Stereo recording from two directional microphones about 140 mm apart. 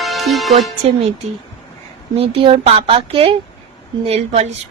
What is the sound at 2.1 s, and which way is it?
Speech, 40° right (ahead or behind).